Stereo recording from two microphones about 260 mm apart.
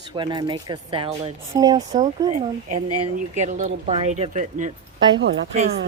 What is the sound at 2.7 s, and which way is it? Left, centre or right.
Speech, right.